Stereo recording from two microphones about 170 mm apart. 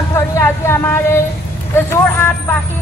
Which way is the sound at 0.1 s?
15° left (ahead or behind).